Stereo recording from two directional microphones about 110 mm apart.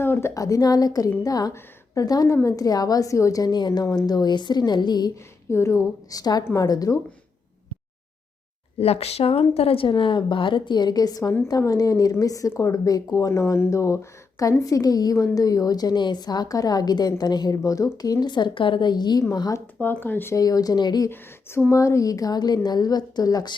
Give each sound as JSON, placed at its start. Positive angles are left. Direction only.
{"t": 0.0, "sound": "speech", "side_deg": 20}
{"t": 5.5, "sound": "a woman's voice", "side_deg": 25}
{"t": 6.4, "sound": "a woman's voice", "side_deg": 25}
{"t": 8.8, "sound": "speech", "side_deg": 65}
{"t": 19.8, "sound": "speech", "side_deg": 15}
{"t": 20.3, "sound": "speech", "side_deg": 35}
{"t": 21.7, "sound": "speech", "side_deg": 30}